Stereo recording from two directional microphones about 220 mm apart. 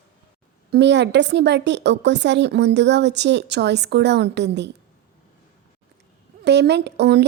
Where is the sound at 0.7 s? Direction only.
50° right (ahead or behind).